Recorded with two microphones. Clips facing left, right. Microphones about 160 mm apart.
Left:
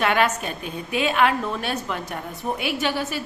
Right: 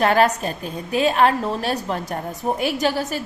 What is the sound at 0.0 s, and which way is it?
A woman's voice, 35° right (ahead or behind).